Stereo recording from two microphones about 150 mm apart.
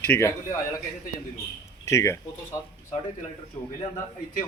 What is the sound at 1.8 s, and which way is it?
A man's voice, 20° left (ahead or behind).